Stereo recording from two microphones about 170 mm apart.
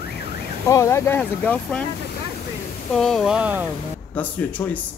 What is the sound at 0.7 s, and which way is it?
Speech, 15° left (ahead or behind).